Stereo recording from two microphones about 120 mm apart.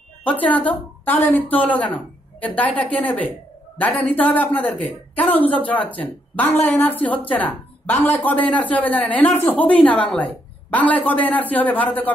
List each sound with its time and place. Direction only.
0.2 s speech: 15° left (ahead or behind)